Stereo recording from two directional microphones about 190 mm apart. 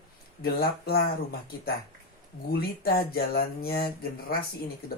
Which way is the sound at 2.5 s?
55° left (ahead or behind).